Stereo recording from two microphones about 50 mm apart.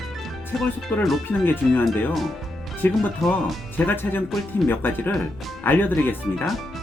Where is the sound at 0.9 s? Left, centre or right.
Left.